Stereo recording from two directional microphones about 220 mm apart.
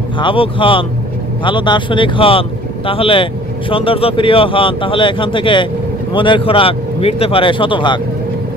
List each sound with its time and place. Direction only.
0.2 s speech: 25° left (ahead or behind)